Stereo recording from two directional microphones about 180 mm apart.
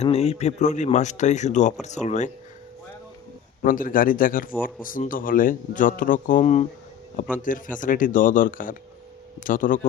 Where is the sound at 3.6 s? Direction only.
50° left (ahead or behind).